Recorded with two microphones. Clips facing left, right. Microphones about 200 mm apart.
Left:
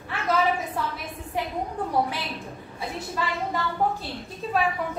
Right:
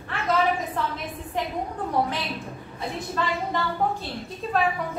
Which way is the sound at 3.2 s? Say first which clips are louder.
Right 2 dB; 10° left (ahead or behind).